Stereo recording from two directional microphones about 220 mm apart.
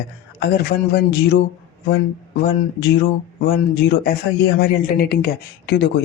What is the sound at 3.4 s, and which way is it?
Speech, 50° left (ahead or behind).